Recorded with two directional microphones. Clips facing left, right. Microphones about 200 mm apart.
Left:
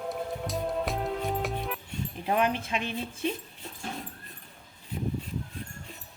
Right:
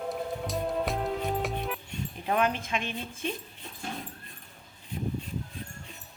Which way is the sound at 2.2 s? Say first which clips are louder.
Left 1 dB; 30° left (ahead or behind).